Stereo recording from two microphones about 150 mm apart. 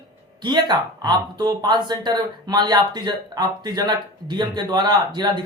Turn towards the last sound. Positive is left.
turn(degrees=-30)  # may be behind; listen again after turning